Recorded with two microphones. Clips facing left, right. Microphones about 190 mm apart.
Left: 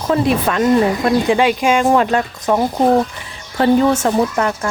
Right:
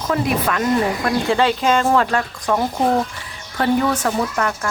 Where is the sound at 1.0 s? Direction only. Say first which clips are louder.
Left 4 dB; 15° left (ahead or behind).